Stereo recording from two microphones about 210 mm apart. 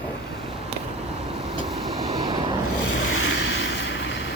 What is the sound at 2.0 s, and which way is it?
Vehicle, 30° right (ahead or behind).